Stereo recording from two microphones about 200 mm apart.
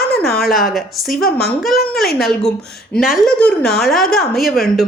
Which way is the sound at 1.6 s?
Centre (ahead or behind).